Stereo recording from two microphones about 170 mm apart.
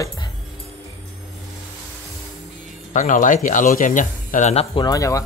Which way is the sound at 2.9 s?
50° left (ahead or behind).